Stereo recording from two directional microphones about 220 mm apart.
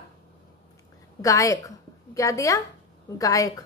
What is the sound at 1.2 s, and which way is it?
A woman's voice, 15° left (ahead or behind).